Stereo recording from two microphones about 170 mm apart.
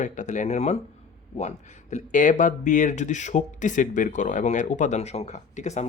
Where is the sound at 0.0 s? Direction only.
45° left (ahead or behind).